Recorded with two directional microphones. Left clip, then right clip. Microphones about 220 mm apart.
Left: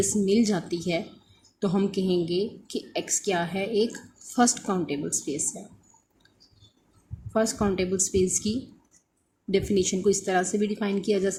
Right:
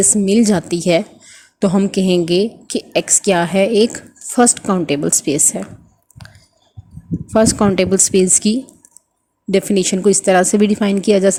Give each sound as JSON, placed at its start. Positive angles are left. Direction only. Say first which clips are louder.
{"t": 0.0, "sound": "a woman's voice", "louder": "right 9 dB", "side_deg": -35}
{"t": 7.3, "sound": "a woman's voice", "louder": "right 12 dB", "side_deg": -35}